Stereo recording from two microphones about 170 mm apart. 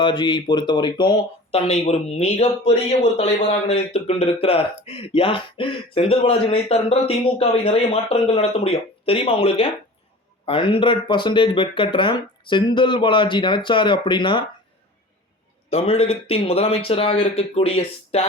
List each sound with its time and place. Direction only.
0.0 s speech: 25° left (ahead or behind)
15.7 s speech: 35° left (ahead or behind)